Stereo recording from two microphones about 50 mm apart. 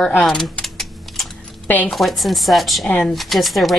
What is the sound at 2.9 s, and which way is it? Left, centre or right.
Speech, centre.